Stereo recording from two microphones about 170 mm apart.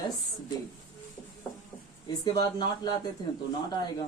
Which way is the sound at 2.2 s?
25° left (ahead or behind).